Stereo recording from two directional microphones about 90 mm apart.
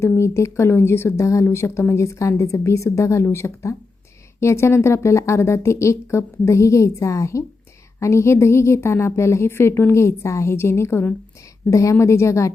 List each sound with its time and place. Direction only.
0.2 s speech: 30° left (ahead or behind)